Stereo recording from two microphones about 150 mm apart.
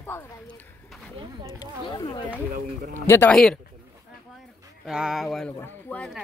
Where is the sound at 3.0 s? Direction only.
15° left (ahead or behind).